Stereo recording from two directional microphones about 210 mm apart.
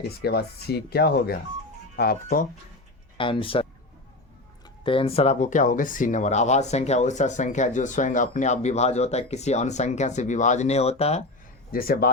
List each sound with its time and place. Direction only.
0.2 s speech: 50° left (ahead or behind)
3.2 s speech: 25° left (ahead or behind)
4.8 s speech: 25° left (ahead or behind)
11.7 s speech: 45° left (ahead or behind)